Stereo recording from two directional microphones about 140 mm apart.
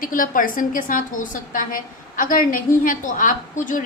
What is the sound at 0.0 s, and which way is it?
A woman's voice, 75° left (ahead or behind).